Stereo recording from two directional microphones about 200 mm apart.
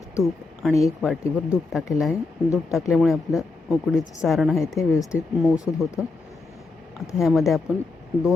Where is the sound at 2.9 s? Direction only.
Centre (ahead or behind).